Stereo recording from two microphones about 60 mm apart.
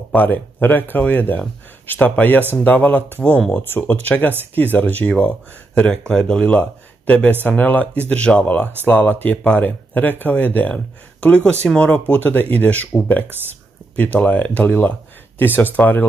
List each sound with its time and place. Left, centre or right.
0.1 s speech: left
5.8 s speech: centre
8.8 s speech: left
11.9 s speech: left
13.9 s speech: left